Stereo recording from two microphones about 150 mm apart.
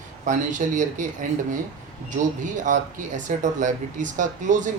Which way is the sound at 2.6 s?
55° right (ahead or behind).